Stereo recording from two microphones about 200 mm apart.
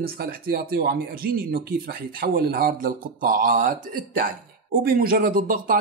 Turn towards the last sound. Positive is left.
turn(degrees=-45)  # may be behind; listen again after turning